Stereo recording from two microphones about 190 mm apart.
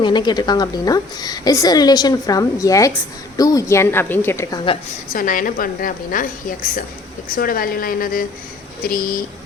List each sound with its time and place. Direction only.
0.0 s a woman's voice: 25° left (ahead or behind)
5.1 s a woman's voice: 45° left (ahead or behind)